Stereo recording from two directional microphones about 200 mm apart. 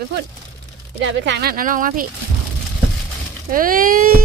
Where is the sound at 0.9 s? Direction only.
60° right (ahead or behind); by 2.0 s 45° right (ahead or behind).